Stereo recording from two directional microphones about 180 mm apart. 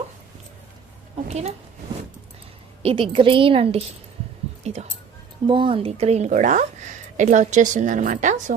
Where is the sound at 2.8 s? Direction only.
30° right (ahead or behind).